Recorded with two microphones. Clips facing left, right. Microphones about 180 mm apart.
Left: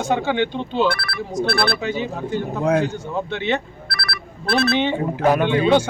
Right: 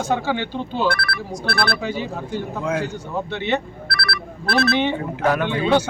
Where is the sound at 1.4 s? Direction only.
25° left (ahead or behind).